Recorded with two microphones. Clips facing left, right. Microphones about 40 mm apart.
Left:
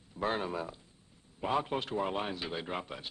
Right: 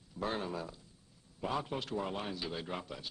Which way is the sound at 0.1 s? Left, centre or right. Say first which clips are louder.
Left 4 dB; left.